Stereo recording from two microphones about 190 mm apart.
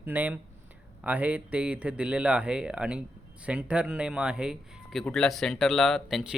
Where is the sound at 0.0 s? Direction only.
10° right (ahead or behind).